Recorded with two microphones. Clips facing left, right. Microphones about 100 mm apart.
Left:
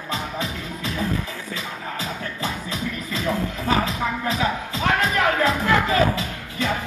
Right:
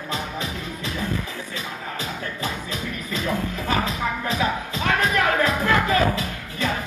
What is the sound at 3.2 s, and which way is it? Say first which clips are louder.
Music: left 1 dB; 30° left (ahead or behind).